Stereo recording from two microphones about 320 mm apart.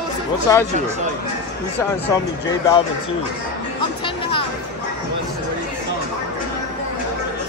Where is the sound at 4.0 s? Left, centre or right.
Centre.